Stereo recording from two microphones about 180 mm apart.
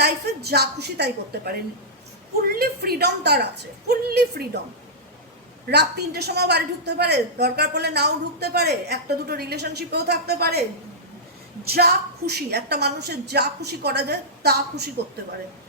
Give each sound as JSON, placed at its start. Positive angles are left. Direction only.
{"t": 0.0, "sound": "a woman's voice", "side_deg": -65}
{"t": 2.6, "sound": "a woman's voice", "side_deg": -60}
{"t": 5.6, "sound": "a woman's voice", "side_deg": -60}
{"t": 11.7, "sound": "a woman's voice", "side_deg": -60}